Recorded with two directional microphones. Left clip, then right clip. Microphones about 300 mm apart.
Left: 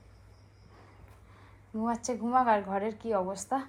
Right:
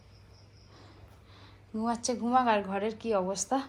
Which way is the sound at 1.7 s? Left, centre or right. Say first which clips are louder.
Right 1 dB; centre.